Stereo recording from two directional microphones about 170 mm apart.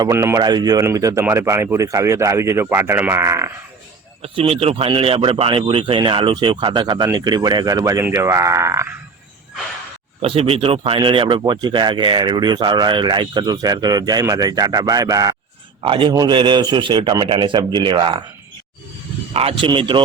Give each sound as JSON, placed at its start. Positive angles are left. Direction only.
{"t": 0.0, "sound": "speech", "side_deg": -15}
{"t": 4.2, "sound": "speech", "side_deg": -35}
{"t": 10.2, "sound": "speech", "side_deg": -35}
{"t": 19.3, "sound": "speech", "side_deg": -35}